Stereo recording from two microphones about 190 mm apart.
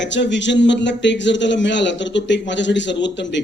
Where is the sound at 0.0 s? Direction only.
70° left (ahead or behind).